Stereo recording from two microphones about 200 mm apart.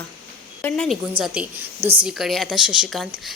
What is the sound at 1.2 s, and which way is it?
Speech, 25° right (ahead or behind).